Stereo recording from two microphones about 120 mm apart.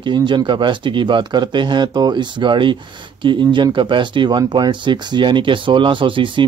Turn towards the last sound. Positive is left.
turn(degrees=-45)  # may be behind; listen again after turning